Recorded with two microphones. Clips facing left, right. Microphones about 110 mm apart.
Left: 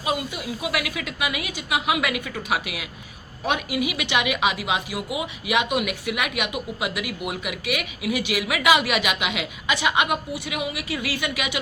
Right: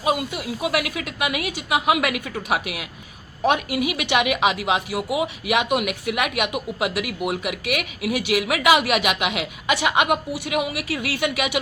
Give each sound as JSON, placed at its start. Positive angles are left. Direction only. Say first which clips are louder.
{"t": 0.6, "sound": "speech", "louder": "right 4 dB", "side_deg": -45}